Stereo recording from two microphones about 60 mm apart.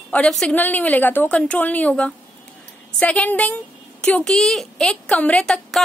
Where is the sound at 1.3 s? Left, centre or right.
Centre.